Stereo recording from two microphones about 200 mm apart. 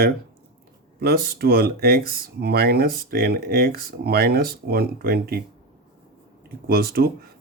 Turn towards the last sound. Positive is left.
turn(degrees=-50)  # may be behind; listen again after turning